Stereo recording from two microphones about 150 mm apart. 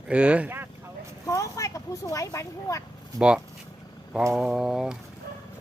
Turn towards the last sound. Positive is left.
turn(degrees=-5)  # may be behind; listen again after turning